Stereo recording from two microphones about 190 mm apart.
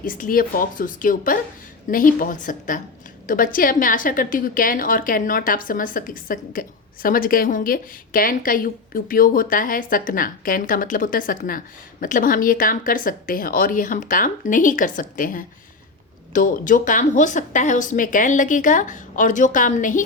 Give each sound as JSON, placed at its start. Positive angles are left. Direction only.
{"t": 0.0, "sound": "a woman's voice", "side_deg": 45}